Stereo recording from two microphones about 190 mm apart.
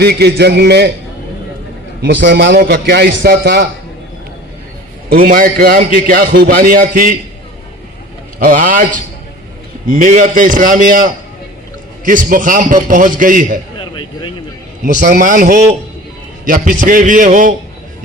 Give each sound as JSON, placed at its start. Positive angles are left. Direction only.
{"t": 0.0, "sound": "a man's voice", "side_deg": -60}
{"t": 2.0, "sound": "a man's voice", "side_deg": -70}
{"t": 5.0, "sound": "a man's voice", "side_deg": -50}
{"t": 8.4, "sound": "a man's voice", "side_deg": -45}
{"t": 14.8, "sound": "a man's voice", "side_deg": -45}